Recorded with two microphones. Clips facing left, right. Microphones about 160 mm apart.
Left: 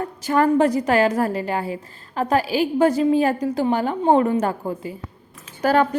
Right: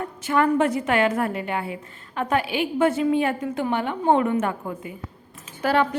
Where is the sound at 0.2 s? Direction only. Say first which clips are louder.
Left 3 dB; 35° left (ahead or behind).